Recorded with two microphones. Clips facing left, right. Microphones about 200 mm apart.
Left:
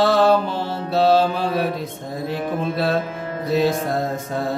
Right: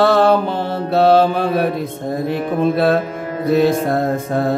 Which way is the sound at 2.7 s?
55° right (ahead or behind).